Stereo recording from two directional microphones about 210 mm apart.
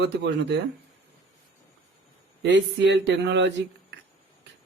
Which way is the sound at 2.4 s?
55° right (ahead or behind).